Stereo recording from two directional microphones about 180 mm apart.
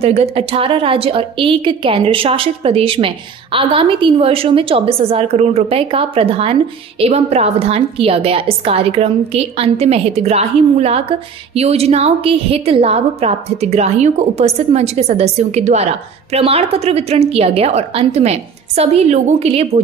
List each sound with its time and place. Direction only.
0.0 s a woman's voice: 35° right (ahead or behind)